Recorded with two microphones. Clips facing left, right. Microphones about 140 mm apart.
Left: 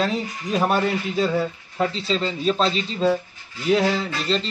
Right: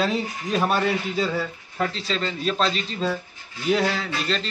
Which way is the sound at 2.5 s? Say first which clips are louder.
Left 3 dB; 30° left (ahead or behind).